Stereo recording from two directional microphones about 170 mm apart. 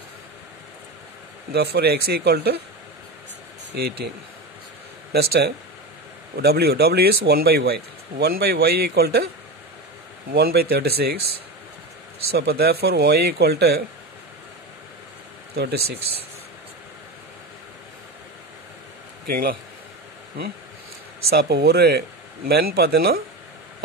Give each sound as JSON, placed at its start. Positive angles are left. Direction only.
{"t": 1.5, "sound": "speech", "side_deg": -70}
{"t": 3.7, "sound": "speech", "side_deg": -70}
{"t": 5.1, "sound": "speech", "side_deg": -70}
{"t": 10.3, "sound": "speech", "side_deg": -65}
{"t": 12.4, "sound": "speech", "side_deg": -70}
{"t": 15.5, "sound": "speech", "side_deg": -75}
{"t": 19.2, "sound": "a man's voice", "side_deg": -60}
{"t": 21.3, "sound": "speech", "side_deg": -70}